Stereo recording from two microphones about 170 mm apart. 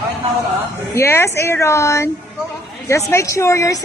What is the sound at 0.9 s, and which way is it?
A woman's voice, 15° left (ahead or behind).